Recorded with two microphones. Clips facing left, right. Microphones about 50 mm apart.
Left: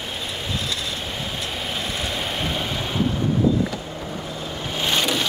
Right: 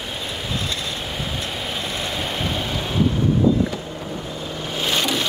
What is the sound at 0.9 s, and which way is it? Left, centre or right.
Vehicle, centre.